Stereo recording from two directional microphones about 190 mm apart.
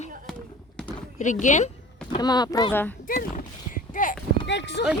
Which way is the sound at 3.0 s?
45° left (ahead or behind).